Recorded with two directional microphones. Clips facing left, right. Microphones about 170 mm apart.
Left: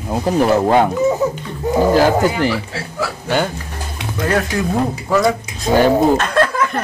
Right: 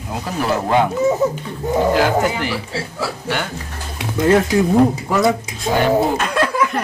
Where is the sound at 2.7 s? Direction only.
30° right (ahead or behind).